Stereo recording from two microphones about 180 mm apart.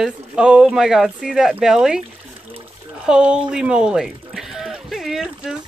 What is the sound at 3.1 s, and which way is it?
Speech, 5° right (ahead or behind).